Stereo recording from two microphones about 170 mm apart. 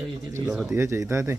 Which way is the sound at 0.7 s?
15° right (ahead or behind).